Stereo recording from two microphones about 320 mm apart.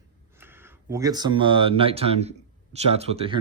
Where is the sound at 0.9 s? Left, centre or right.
Centre.